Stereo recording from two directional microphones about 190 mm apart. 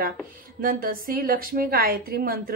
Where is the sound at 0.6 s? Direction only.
50° right (ahead or behind).